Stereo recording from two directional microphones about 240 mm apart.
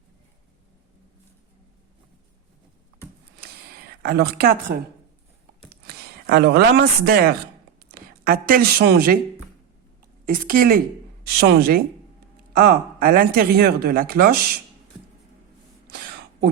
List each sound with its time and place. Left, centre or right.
4.0 s speech: right
5.6 s a sound: right
7.8 s speech: right
10.2 s speech: right